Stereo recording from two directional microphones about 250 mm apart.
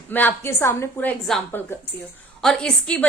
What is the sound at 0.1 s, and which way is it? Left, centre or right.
A woman's voice, centre.